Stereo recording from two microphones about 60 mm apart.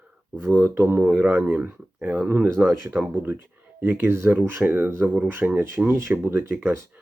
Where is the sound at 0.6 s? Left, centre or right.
Right.